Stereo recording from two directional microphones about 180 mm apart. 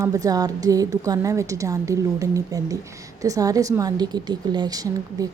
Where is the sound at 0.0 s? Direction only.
20° right (ahead or behind).